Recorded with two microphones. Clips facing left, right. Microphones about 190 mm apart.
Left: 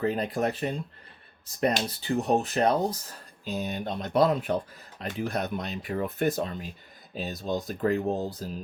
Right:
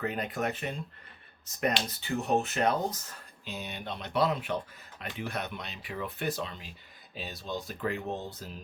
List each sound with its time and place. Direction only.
0.0 s speech: 35° left (ahead or behind)